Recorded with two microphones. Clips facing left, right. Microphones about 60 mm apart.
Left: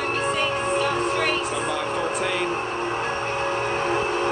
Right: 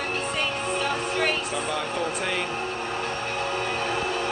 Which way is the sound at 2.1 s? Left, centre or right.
Centre.